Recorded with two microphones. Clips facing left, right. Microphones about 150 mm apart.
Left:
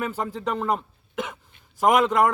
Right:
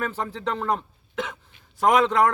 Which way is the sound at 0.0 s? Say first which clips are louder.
Left 1 dB; 5° left (ahead or behind).